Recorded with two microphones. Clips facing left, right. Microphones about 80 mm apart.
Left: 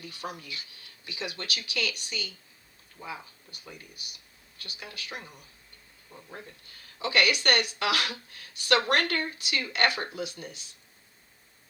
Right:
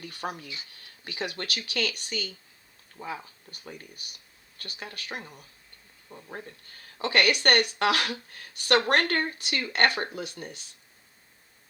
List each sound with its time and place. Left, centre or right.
0.0 s speech: right